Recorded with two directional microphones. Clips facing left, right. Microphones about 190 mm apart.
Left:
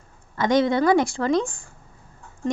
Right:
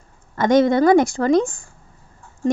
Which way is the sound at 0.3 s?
50° right (ahead or behind).